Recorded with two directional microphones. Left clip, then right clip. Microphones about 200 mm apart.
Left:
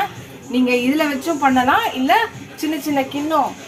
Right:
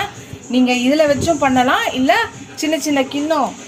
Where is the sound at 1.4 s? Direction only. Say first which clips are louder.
Right 1 dB; 45° right (ahead or behind).